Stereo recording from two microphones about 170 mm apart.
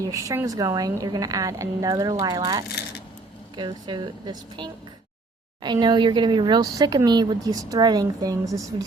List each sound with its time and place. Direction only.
0.3 s speech: 20° right (ahead or behind)